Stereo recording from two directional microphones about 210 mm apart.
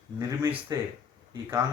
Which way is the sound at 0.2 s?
15° right (ahead or behind).